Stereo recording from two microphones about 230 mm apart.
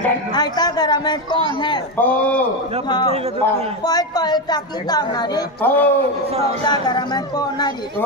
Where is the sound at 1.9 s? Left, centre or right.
Centre.